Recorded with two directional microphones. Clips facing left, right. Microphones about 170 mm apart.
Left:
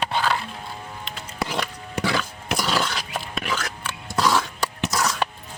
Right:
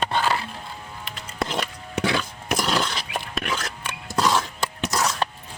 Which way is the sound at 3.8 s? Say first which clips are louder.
Even; 20° right (ahead or behind).